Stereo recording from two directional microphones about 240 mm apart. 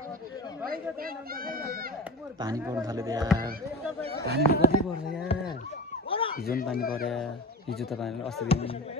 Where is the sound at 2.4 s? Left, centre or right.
Centre.